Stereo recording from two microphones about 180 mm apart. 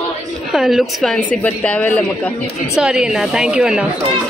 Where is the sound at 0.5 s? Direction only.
Centre (ahead or behind).